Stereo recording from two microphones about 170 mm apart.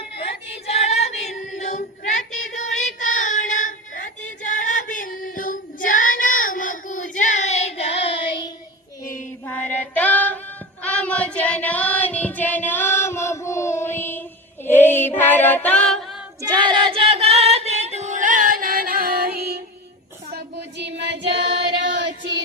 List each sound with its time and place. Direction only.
0.7 s child singing: 40° left (ahead or behind)
4.4 s female singing: 50° left (ahead or behind); by 8.4 s 35° left (ahead or behind)
9.5 s music: 10° left (ahead or behind)
10.8 s child singing: 5° left (ahead or behind)
14.7 s music: 10° left (ahead or behind)
16.4 s singing: 25° right (ahead or behind); by 19.5 s 65° right (ahead or behind)
20.3 s child singing: 85° right